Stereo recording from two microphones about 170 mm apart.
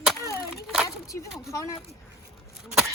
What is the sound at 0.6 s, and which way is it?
Speech, centre (ahead or behind).